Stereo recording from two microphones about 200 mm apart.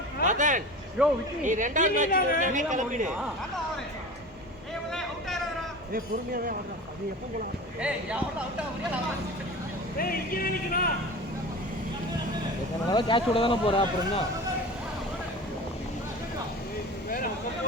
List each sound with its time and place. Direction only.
0.3 s a sound: 40° right (ahead or behind)
1.0 s speech: 5° right (ahead or behind)
1.4 s a woman's voice: 40° right (ahead or behind)
2.0 s speech: 45° left (ahead or behind)
2.4 s a woman's voice: 40° right (ahead or behind)
4.9 s a sound: centre (ahead or behind)
5.9 s speech: 45° right (ahead or behind)
7.8 s speech: 5° right (ahead or behind)
10.0 s speech: 45° left (ahead or behind)
12.9 s speech: 25° left (ahead or behind)